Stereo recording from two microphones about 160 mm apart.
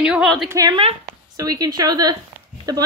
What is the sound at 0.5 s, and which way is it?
Speech, 20° right (ahead or behind).